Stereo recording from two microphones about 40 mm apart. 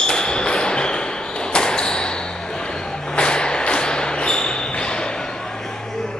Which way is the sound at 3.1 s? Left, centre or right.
Left.